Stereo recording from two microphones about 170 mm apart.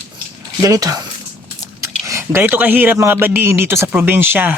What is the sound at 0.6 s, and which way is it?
Speech, 20° right (ahead or behind).